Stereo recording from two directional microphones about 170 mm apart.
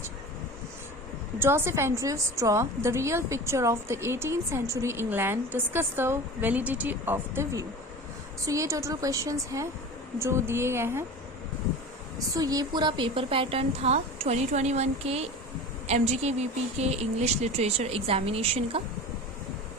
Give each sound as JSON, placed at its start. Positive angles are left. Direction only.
{"t": 1.4, "sound": "a woman's voice", "side_deg": -15}
{"t": 12.3, "sound": "speech", "side_deg": -20}